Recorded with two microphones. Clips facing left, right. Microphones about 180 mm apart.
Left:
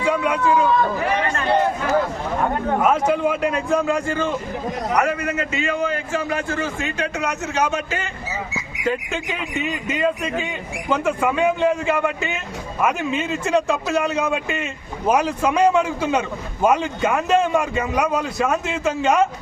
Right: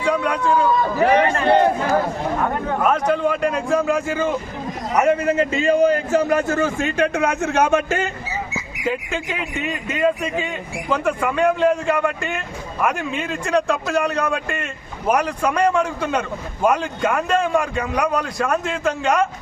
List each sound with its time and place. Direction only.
0.0 s speech: 5° left (ahead or behind)
1.0 s a man's voice: 55° right (ahead or behind)
2.8 s speech: 5° left (ahead or behind)
4.9 s a man's voice: 25° right (ahead or behind); by 8.0 s 50° right (ahead or behind)
8.8 s speech: 5° right (ahead or behind)